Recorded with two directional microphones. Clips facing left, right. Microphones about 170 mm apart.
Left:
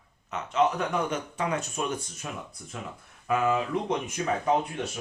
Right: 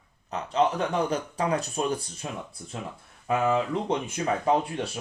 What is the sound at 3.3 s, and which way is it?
Speech, 30° right (ahead or behind).